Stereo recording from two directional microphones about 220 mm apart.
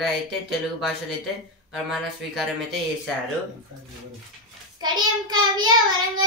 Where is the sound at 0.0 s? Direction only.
Centre (ahead or behind).